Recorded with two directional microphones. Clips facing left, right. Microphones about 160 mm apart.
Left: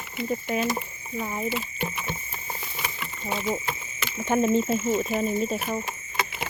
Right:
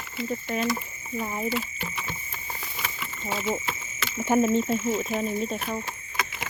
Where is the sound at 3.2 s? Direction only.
Centre (ahead or behind).